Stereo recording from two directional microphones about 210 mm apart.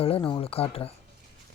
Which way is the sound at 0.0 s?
25° left (ahead or behind).